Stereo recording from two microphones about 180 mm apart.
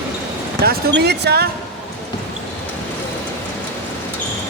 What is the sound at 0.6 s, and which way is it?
Speech, 65° right (ahead or behind).